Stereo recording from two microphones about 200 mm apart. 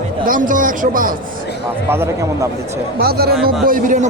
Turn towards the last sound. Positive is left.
turn(degrees=-40)  # may be behind; listen again after turning